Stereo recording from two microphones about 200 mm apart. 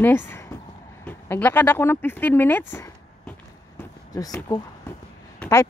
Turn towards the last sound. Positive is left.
turn(degrees=10)  # may be behind; listen again after turning